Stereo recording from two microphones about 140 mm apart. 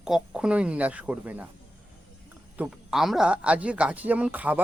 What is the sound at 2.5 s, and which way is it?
A man's voice, 5° right (ahead or behind).